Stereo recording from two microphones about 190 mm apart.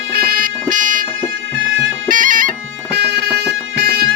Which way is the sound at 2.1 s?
45° right (ahead or behind).